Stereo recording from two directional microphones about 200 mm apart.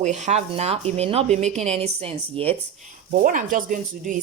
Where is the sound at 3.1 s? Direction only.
40° right (ahead or behind).